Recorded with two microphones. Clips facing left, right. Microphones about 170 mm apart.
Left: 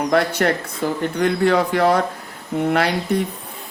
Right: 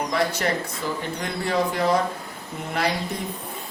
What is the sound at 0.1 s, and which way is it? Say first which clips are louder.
Speech: left 7 dB; 65° left (ahead or behind).